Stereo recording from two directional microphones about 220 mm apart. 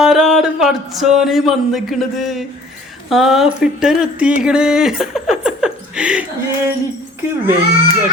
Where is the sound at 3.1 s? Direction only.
Centre (ahead or behind).